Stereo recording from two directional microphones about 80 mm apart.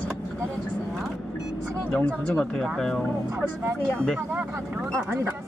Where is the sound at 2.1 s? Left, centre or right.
Centre.